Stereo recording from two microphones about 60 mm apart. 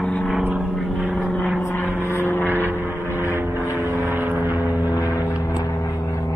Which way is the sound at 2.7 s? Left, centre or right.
Right.